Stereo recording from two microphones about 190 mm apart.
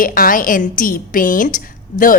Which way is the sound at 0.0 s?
45° left (ahead or behind).